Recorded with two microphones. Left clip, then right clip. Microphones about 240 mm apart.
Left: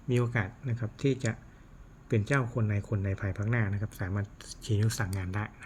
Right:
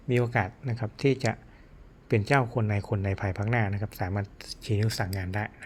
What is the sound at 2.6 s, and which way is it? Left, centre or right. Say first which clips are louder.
Speech: right 5 dB; centre.